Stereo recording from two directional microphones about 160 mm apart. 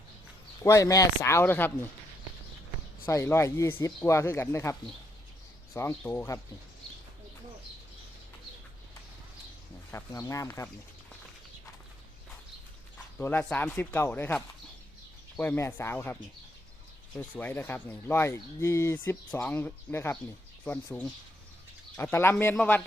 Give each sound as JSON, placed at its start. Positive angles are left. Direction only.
{"t": 0.6, "sound": "speech", "side_deg": 20}
{"t": 3.1, "sound": "speech", "side_deg": 15}
{"t": 9.9, "sound": "speech", "side_deg": 20}
{"t": 13.1, "sound": "speech", "side_deg": 10}
{"t": 17.2, "sound": "speech", "side_deg": 10}